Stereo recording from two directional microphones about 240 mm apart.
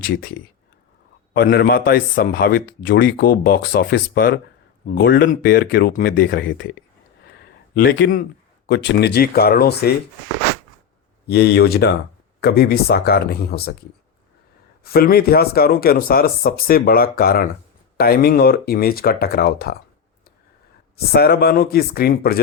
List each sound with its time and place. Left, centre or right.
1.3 s speech: left
7.8 s speech: left
11.3 s speech: left
14.8 s speech: left
20.9 s speech: left